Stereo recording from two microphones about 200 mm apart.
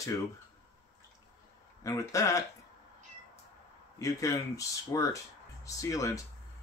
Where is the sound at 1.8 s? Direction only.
15° left (ahead or behind).